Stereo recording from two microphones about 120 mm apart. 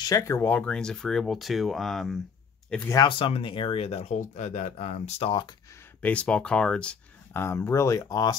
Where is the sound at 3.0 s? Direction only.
45° left (ahead or behind); by 5.1 s 90° left.